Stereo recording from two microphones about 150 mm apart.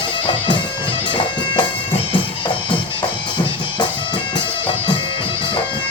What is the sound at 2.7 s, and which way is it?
Music, 30° left (ahead or behind).